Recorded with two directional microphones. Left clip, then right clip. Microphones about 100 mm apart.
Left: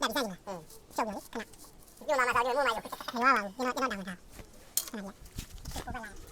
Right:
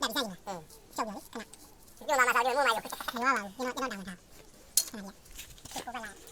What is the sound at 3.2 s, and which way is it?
Speech, 40° left (ahead or behind).